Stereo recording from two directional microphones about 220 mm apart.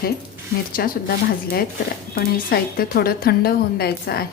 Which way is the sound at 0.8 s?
45° left (ahead or behind).